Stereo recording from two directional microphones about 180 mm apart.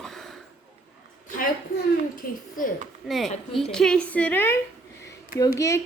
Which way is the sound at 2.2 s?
55° left (ahead or behind).